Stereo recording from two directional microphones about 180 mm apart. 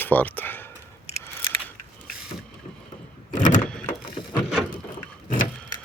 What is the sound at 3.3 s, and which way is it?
Vehicle, 45° left (ahead or behind).